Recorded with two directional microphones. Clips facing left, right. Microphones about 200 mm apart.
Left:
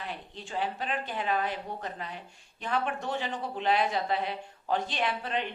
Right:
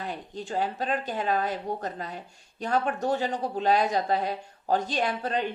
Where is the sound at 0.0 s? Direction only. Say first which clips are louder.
Right 5 dB; 40° right (ahead or behind).